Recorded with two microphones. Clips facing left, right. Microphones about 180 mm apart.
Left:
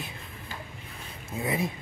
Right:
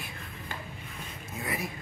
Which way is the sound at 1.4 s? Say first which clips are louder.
Left 6 dB; 25° left (ahead or behind).